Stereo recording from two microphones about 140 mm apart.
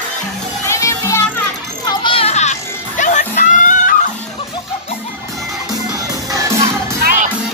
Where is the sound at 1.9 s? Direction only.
40° left (ahead or behind).